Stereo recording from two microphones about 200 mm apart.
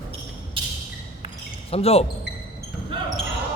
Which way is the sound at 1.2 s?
30° left (ahead or behind).